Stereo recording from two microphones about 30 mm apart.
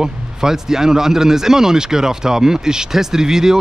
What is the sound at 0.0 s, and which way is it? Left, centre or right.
Speech, centre.